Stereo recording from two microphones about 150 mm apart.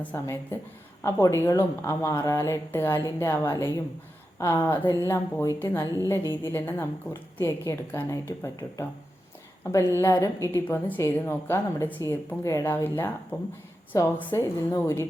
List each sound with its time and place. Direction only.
0.0 s a woman's voice: 15° left (ahead or behind)